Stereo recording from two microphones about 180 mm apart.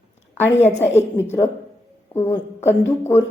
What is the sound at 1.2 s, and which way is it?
A woman's voice, 15° left (ahead or behind).